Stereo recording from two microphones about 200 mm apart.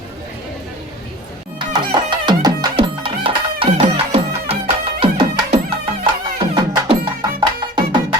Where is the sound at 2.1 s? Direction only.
20° right (ahead or behind).